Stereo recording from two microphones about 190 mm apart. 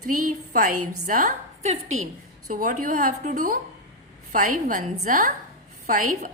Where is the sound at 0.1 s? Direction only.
45° right (ahead or behind).